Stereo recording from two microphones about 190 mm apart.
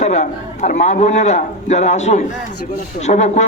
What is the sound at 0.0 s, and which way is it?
A man's voice, 40° left (ahead or behind).